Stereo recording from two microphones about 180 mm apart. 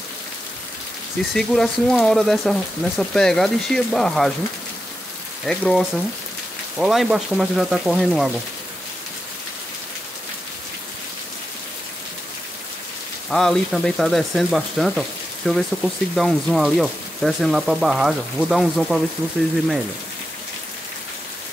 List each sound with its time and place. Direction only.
1.3 s frying: centre (ahead or behind)
5.4 s frying: 5° left (ahead or behind)
13.3 s frying: centre (ahead or behind)